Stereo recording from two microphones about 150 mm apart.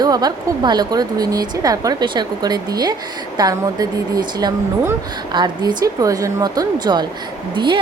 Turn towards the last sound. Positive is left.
turn(degrees=-30)  # may be behind; listen again after turning